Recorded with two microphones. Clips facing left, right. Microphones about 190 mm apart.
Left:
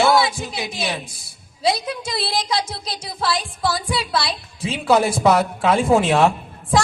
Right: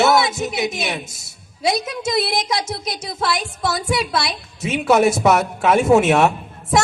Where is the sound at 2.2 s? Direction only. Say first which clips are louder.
Left 2 dB; 30° left (ahead or behind).